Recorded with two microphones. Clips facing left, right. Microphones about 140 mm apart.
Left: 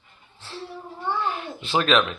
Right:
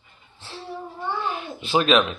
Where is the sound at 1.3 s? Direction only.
15° right (ahead or behind).